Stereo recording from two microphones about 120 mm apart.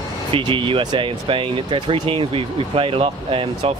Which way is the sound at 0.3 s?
45° right (ahead or behind).